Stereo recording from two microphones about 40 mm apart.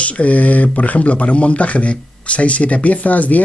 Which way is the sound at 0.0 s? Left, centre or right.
Left.